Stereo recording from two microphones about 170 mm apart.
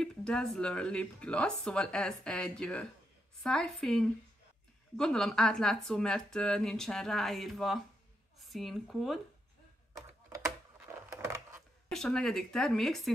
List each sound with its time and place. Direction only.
0.0 s speech: 5° left (ahead or behind)
10.3 s a sound: 15° right (ahead or behind)
11.9 s speech: 5° left (ahead or behind)